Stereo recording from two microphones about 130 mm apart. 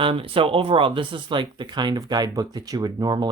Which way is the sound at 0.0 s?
45° right (ahead or behind).